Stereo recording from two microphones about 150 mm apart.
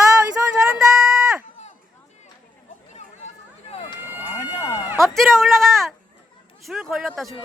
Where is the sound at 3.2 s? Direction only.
45° left (ahead or behind).